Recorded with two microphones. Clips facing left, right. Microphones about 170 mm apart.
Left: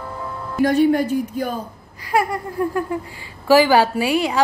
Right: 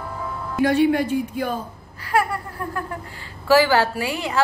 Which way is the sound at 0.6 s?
40° left (ahead or behind).